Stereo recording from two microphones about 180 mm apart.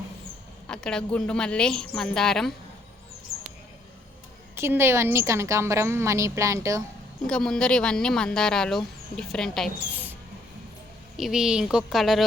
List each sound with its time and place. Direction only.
0.7 s speech: 5° left (ahead or behind)
4.5 s a woman's voice: 15° right (ahead or behind)
7.3 s speech: 5° left (ahead or behind)
11.2 s speech: 5° right (ahead or behind)